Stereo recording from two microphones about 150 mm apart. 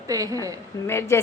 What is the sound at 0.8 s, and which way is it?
Speech, 15° left (ahead or behind).